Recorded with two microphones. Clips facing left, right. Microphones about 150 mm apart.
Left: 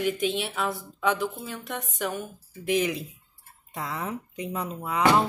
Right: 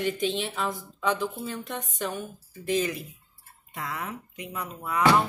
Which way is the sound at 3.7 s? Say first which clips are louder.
Left 2 dB; 30° left (ahead or behind).